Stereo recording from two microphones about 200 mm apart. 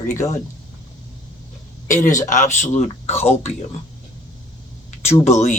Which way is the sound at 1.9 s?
40° left (ahead or behind).